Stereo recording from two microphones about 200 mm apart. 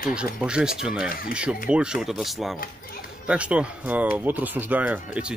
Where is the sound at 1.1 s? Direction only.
45° left (ahead or behind).